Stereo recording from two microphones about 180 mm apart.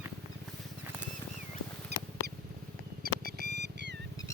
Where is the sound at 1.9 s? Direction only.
65° right (ahead or behind).